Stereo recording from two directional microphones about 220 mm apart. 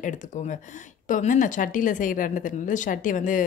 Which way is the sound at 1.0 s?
35° left (ahead or behind).